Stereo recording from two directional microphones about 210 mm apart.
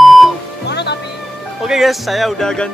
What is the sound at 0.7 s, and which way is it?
Music, 55° left (ahead or behind).